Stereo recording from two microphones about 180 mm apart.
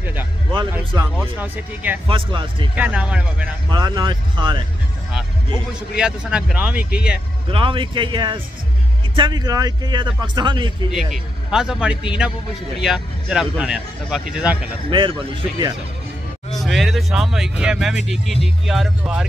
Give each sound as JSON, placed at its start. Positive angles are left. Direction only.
{"t": 0.0, "sound": "music", "side_deg": -10}
{"t": 1.1, "sound": "speech", "side_deg": -10}
{"t": 2.0, "sound": "a man's voice", "side_deg": -30}
{"t": 2.7, "sound": "speech", "side_deg": -10}
{"t": 3.7, "sound": "a man's voice", "side_deg": -25}
{"t": 5.9, "sound": "speech", "side_deg": -5}
{"t": 7.5, "sound": "a man's voice", "side_deg": -30}
{"t": 10.9, "sound": "speech", "side_deg": 0}
{"t": 14.9, "sound": "a man's voice", "side_deg": -25}
{"t": 16.6, "sound": "speech", "side_deg": 0}